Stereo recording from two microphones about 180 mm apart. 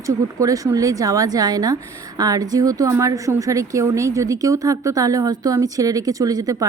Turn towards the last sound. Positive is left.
turn(degrees=-20)  # may be behind; listen again after turning